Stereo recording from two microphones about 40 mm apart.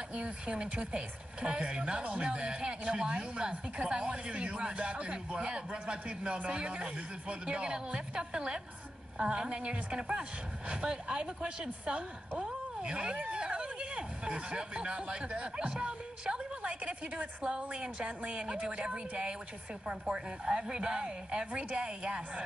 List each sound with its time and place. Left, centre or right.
0.1 s speech: right